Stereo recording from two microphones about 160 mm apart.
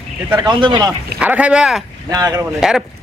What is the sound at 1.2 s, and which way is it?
Speech, 10° right (ahead or behind).